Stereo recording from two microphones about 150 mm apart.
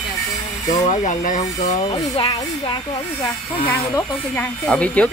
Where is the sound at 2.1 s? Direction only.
35° left (ahead or behind).